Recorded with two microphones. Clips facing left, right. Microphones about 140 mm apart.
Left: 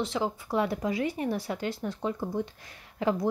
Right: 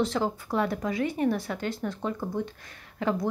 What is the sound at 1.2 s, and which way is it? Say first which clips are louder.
Speech: right 3 dB; 30° left (ahead or behind).